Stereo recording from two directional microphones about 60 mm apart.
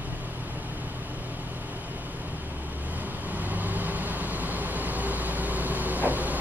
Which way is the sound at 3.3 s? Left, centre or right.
Right.